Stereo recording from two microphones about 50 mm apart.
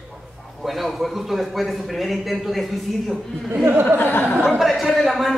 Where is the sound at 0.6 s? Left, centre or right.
Centre.